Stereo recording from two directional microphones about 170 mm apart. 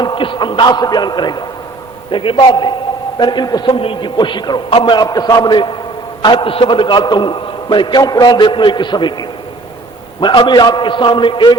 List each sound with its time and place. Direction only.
0.0 s a man's voice: 30° left (ahead or behind)